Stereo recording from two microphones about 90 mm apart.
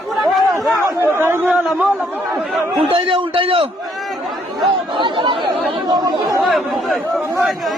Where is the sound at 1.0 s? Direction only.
25° right (ahead or behind).